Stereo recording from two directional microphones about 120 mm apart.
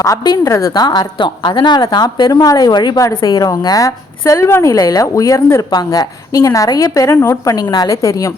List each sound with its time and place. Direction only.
0.0 s speech: 25° left (ahead or behind)
7.5 s speech: 35° left (ahead or behind)